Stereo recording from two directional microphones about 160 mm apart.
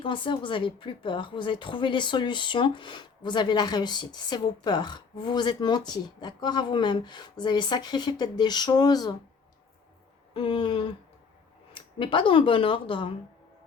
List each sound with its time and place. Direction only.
0.0 s a woman's voice: 30° left (ahead or behind)
10.3 s speech: 30° left (ahead or behind)